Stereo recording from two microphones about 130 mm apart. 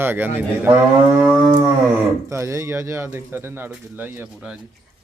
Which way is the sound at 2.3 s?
25° right (ahead or behind).